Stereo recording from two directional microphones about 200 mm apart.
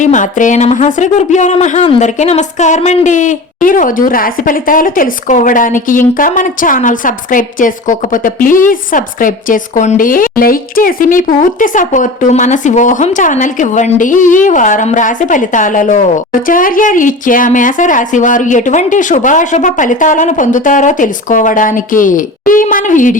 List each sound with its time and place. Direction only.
0.0 s speech: 40° left (ahead or behind)